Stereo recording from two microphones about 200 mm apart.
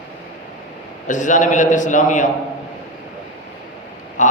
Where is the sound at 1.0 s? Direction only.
40° left (ahead or behind).